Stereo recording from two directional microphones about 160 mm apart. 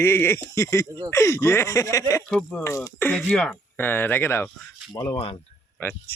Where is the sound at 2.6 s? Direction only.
20° left (ahead or behind).